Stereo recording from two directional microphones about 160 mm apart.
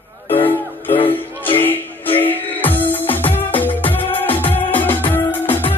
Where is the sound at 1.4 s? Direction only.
10° left (ahead or behind).